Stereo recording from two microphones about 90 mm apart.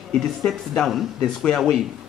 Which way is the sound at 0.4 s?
Centre (ahead or behind).